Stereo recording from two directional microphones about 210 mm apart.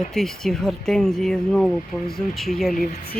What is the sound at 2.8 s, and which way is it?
Speech, 45° left (ahead or behind).